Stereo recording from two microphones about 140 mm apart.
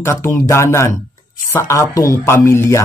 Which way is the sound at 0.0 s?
20° left (ahead or behind).